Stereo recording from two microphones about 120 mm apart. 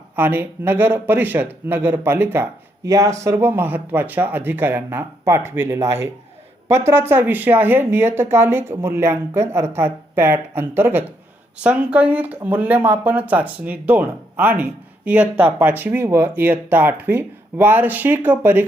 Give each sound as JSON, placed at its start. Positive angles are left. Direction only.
{"t": 0.2, "sound": "speech", "side_deg": -20}